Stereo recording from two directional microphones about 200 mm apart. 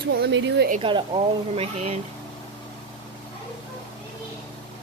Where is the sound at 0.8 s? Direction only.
25° right (ahead or behind).